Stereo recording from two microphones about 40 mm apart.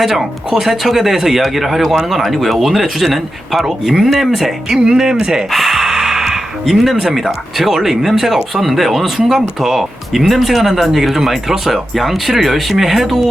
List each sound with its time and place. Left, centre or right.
0.0 s speech: centre
4.7 s speech: centre
5.5 s speech: centre